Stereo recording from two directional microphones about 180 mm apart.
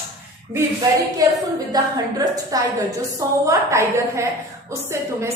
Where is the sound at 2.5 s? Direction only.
20° right (ahead or behind).